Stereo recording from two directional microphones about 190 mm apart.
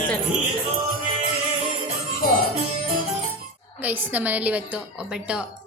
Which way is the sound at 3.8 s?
10° right (ahead or behind).